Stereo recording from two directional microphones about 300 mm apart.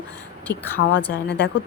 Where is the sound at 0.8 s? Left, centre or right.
Left.